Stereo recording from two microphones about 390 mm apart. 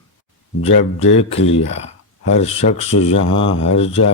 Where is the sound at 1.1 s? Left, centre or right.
Centre.